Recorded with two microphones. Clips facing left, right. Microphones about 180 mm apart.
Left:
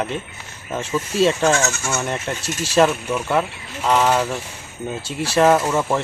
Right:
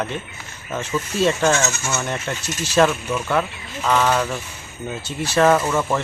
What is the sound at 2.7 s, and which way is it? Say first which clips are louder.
Speech: left 1 dB; 5° left (ahead or behind).